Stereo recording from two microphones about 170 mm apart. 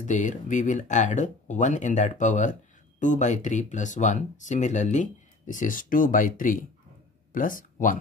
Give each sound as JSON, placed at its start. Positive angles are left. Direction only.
{"t": 0.0, "sound": "speech", "side_deg": 45}